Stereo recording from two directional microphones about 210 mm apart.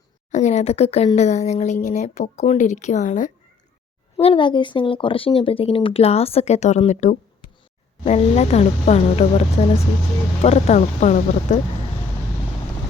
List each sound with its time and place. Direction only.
0.3 s speech: 35° left (ahead or behind)
4.2 s speech: 25° left (ahead or behind)